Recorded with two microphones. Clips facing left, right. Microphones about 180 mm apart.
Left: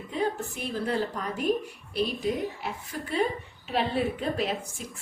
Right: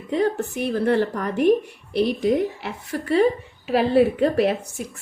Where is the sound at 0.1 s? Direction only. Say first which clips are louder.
Right 8 dB; 75° right (ahead or behind).